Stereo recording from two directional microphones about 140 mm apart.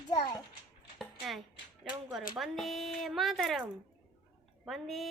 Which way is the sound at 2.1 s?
Centre (ahead or behind).